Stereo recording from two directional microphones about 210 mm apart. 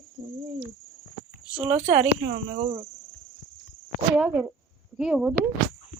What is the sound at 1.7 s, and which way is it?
Speech, 30° right (ahead or behind).